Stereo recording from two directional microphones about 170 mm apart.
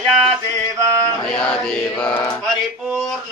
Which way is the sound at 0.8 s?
20° right (ahead or behind).